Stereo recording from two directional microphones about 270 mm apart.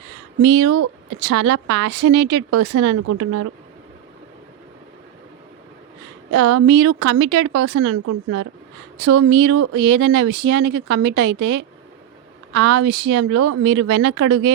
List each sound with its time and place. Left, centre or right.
0.4 s speech: right
6.3 s speech: right